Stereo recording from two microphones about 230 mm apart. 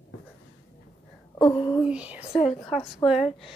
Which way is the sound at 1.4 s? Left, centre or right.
Centre.